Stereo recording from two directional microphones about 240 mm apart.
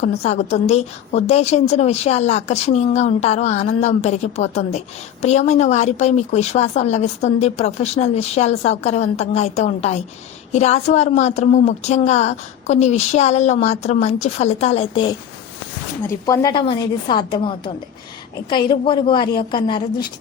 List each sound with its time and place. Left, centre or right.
0.0 s a woman's voice: left